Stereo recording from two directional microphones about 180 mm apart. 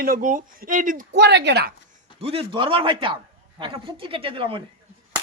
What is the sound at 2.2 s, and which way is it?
A man's voice, 30° right (ahead or behind).